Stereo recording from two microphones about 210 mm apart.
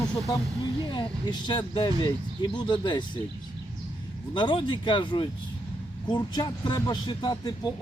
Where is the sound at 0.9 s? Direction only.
20° left (ahead or behind).